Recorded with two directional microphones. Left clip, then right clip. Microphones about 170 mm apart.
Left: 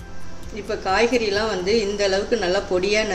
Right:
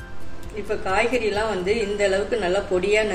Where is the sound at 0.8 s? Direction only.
55° left (ahead or behind).